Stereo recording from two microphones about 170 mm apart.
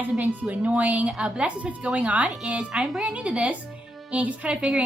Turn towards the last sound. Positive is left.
turn(degrees=-5)  # may be behind; listen again after turning